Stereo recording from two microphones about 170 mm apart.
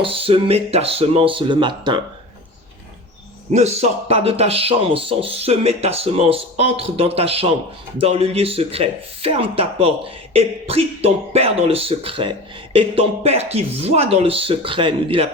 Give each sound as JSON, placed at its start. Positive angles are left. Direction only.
{"t": 0.0, "sound": "speech", "side_deg": -35}
{"t": 3.5, "sound": "speech", "side_deg": -40}